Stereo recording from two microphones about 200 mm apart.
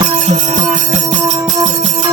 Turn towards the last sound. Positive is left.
turn(degrees=-35)  # may be behind; listen again after turning